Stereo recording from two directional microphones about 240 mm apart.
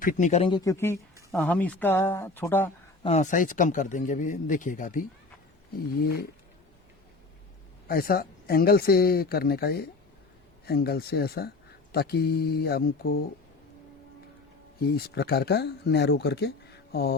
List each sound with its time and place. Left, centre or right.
0.0 s speech: left; by 2.6 s centre
3.0 s speech: left
7.9 s speech: left
14.8 s speech: left